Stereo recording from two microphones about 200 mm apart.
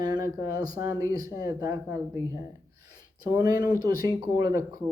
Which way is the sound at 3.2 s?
20° right (ahead or behind).